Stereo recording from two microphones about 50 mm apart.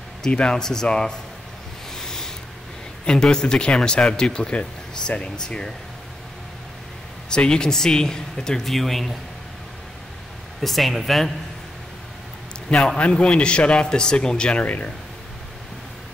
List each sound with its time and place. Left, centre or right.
0.2 s speech: centre
2.0 s a sound: centre
3.1 s speech: centre
7.2 s speech: centre
10.6 s speech: centre
12.6 s a man's voice: centre
14.6 s a man's voice: left